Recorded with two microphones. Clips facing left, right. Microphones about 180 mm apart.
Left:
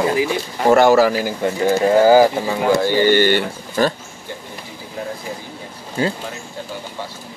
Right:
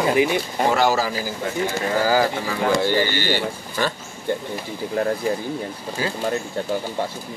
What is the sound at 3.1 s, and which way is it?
Speech, 55° left (ahead or behind).